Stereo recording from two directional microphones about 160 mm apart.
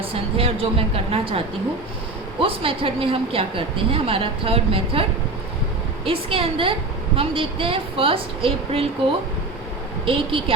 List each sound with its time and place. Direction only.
0.0 s a woman's voice: 35° right (ahead or behind)
2.4 s a woman's voice: 35° right (ahead or behind)
6.1 s a woman's voice: 35° right (ahead or behind)
10.1 s a woman's voice: 35° right (ahead or behind)